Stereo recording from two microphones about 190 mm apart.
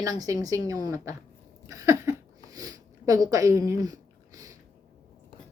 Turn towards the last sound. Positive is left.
turn(degrees=-15)  # may be behind; listen again after turning